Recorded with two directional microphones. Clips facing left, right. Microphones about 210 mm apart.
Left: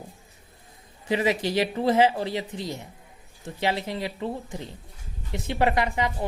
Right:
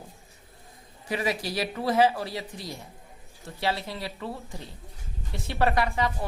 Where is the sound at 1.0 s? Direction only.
20° left (ahead or behind).